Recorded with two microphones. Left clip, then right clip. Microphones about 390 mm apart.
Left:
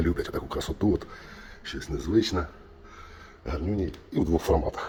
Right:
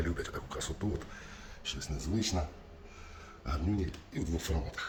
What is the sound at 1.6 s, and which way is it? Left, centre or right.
Speech, centre.